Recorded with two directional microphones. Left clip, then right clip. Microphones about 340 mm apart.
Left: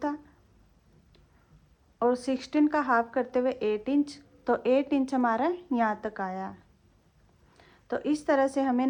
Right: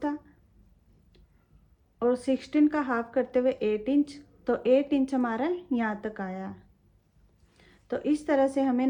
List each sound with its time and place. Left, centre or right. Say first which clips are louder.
2.0 s speech: even; left
7.5 s a woman's voice: even; left